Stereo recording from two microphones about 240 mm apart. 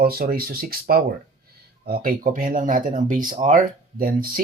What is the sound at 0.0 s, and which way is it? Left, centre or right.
Speech, right.